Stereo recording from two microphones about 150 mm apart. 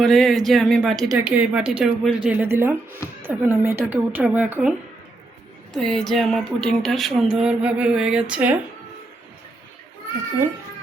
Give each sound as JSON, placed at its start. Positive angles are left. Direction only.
{"t": 0.0, "sound": "speech", "side_deg": 0}
{"t": 5.7, "sound": "speech", "side_deg": 0}